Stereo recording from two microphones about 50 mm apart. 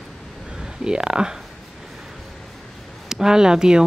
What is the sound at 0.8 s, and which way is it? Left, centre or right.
Speech, centre.